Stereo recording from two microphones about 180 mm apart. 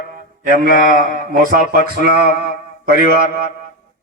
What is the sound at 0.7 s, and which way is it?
Speech, 50° left (ahead or behind).